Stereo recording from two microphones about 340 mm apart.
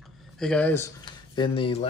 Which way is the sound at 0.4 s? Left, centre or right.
Centre.